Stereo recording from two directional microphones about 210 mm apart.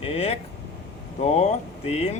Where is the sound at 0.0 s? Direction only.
30° left (ahead or behind).